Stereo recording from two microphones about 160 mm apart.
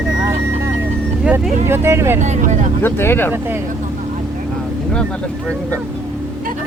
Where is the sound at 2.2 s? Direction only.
45° right (ahead or behind).